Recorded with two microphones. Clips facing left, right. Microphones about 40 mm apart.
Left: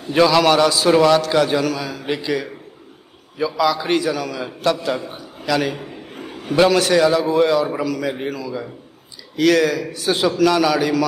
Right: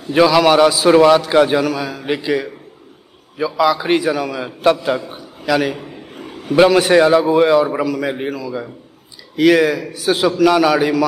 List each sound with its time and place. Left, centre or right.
0.1 s a man's voice: centre
5.8 s a sound: centre
6.5 s a man's voice: centre